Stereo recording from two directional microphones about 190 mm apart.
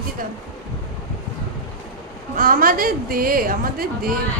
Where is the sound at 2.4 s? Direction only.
50° right (ahead or behind).